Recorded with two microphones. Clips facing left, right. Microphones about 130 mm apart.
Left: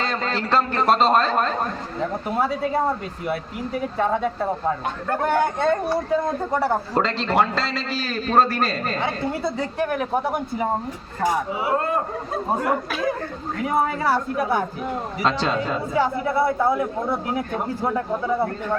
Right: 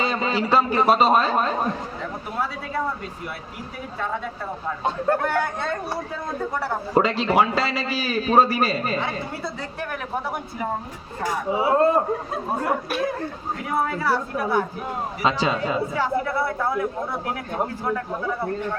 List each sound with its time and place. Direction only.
0.0 s a man's voice: 10° right (ahead or behind)
5.2 s speech: 20° left (ahead or behind)
6.9 s a man's voice: 10° right (ahead or behind)
9.4 s speech: 20° left (ahead or behind)
11.5 s a man's voice: 30° right (ahead or behind)
13.7 s speech: 20° left (ahead or behind)
15.2 s a man's voice: 5° right (ahead or behind)
16.0 s speech: 20° left (ahead or behind)